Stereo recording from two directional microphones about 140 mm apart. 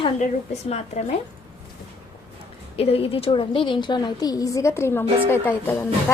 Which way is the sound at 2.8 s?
45° left (ahead or behind).